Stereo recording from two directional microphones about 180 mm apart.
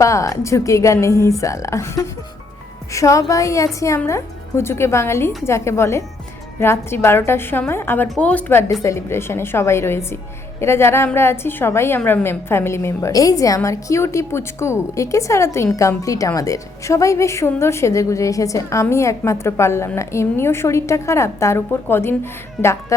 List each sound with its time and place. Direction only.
0.0 s a woman's voice: 15° left (ahead or behind)